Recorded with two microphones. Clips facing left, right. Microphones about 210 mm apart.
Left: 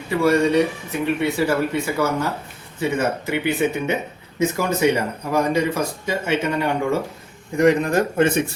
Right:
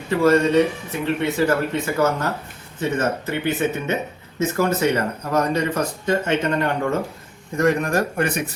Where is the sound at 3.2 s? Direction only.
15° left (ahead or behind).